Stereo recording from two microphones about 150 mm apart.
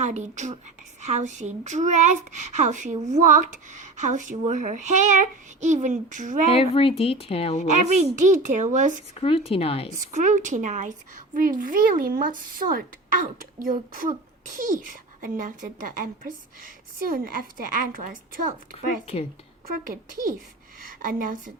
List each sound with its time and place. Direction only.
0.0 s speech: 50° right (ahead or behind)
6.5 s a woman's voice: 40° left (ahead or behind)
7.7 s speech: 55° right (ahead or behind)
9.2 s a woman's voice: 40° left (ahead or behind)
9.9 s a woman's voice: 60° right (ahead or behind)
19.9 s a woman's voice: 65° right (ahead or behind)